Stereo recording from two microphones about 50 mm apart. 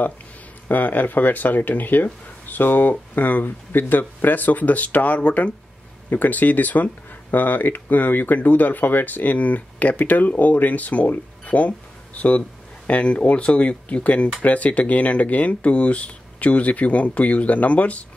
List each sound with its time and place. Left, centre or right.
0.7 s speech: left